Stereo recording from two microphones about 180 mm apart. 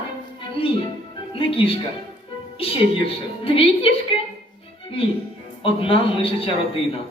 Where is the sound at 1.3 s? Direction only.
30° left (ahead or behind).